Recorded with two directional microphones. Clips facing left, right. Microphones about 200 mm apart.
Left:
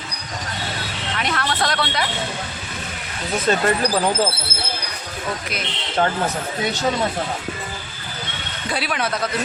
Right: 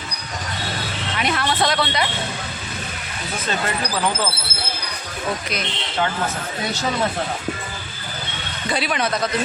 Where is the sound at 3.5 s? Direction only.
45° left (ahead or behind).